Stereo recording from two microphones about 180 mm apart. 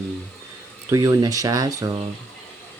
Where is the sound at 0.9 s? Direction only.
20° right (ahead or behind).